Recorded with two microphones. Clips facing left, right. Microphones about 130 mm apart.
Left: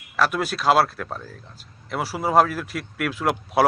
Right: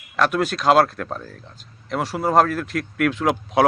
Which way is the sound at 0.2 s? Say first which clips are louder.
Right 2 dB; 5° left (ahead or behind).